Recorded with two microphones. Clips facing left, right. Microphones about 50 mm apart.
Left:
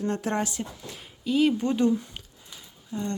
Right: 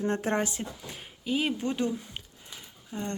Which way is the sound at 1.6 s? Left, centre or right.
Centre.